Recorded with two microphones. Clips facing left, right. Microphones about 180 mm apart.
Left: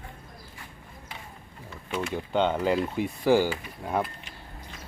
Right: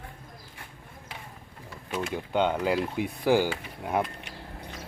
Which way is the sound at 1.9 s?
10° right (ahead or behind).